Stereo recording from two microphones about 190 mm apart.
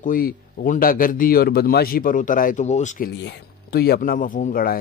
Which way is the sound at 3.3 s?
55° left (ahead or behind).